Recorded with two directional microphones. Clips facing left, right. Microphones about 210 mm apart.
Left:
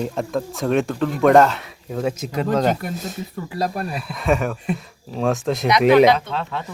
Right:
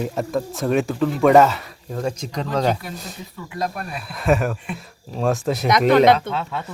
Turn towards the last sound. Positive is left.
turn(degrees=-5)  # may be behind; listen again after turning